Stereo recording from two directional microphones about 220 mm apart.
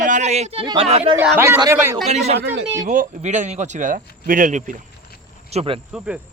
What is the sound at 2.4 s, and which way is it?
Speech, 50° right (ahead or behind).